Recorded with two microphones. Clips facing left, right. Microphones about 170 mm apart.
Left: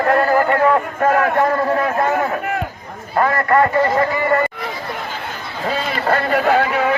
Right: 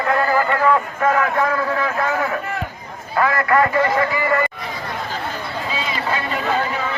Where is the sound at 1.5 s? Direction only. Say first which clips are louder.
Left 4 dB; 35° left (ahead or behind).